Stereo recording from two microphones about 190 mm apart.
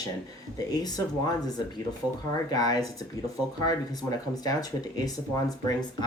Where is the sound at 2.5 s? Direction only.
20° left (ahead or behind).